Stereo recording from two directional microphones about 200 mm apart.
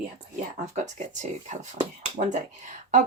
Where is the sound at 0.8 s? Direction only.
35° right (ahead or behind).